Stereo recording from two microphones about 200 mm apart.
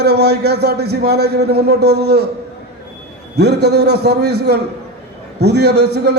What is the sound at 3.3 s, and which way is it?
A man's voice, 55° right (ahead or behind).